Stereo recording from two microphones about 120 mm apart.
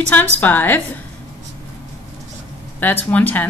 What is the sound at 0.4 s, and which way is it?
Speech, 15° left (ahead or behind).